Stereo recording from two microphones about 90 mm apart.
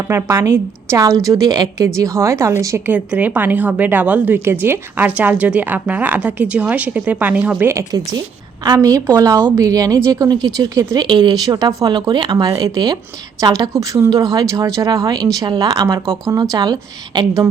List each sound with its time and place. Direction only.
0.1 s a woman's voice: 30° right (ahead or behind)
2.8 s speech: 20° right (ahead or behind)
7.7 s a woman's voice: 40° right (ahead or behind)